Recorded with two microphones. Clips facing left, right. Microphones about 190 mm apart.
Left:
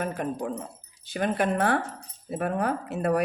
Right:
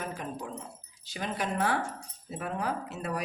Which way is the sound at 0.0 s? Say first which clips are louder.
Left 7 dB; 55° left (ahead or behind).